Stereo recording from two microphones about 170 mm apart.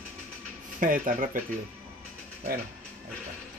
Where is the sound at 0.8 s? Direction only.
50° right (ahead or behind).